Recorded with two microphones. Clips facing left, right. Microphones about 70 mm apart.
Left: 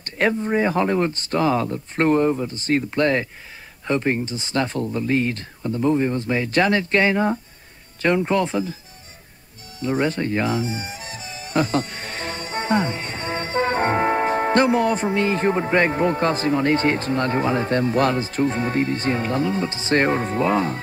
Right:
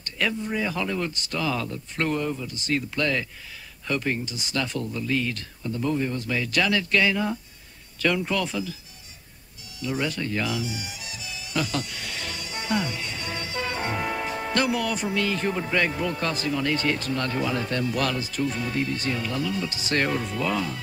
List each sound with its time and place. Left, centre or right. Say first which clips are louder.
0.0 s speech: left 7 dB; left
9.8 s speech: left 6 dB; left